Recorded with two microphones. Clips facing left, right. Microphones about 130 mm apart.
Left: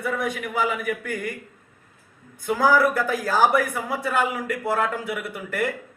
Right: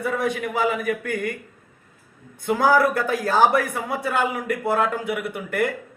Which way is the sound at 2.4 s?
25° right (ahead or behind).